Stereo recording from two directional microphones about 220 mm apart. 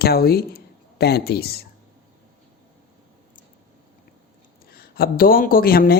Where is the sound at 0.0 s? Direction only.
45° left (ahead or behind).